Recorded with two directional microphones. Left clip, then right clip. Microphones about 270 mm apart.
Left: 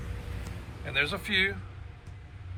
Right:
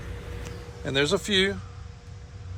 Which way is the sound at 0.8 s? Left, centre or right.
Centre.